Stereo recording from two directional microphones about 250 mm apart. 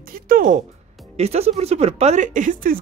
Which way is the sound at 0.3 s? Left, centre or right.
Right.